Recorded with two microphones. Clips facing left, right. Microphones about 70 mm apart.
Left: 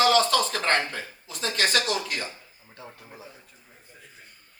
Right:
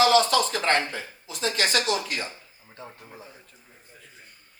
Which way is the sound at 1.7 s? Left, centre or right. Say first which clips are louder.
Right 1 dB; left.